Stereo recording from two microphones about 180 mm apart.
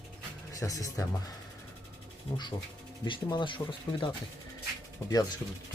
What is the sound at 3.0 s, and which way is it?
Speech, 25° left (ahead or behind).